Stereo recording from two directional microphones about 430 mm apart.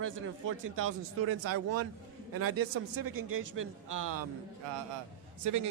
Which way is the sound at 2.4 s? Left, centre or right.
Right.